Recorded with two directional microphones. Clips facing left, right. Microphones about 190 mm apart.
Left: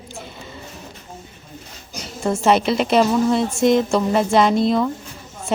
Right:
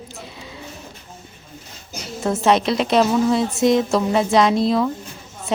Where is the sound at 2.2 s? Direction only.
Centre (ahead or behind).